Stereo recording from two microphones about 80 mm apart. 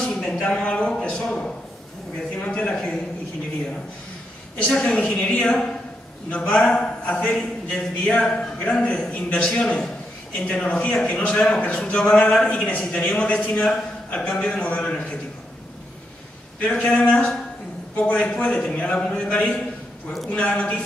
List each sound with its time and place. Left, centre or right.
0.0 s a sound: centre
4.6 s a man's voice: centre
16.5 s a man's voice: centre